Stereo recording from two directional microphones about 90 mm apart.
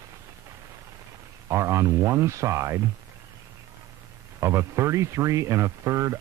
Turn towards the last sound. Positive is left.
turn(degrees=-35)  # may be behind; listen again after turning